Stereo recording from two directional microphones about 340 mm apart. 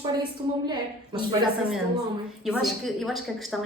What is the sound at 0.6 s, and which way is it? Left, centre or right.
Speech, centre.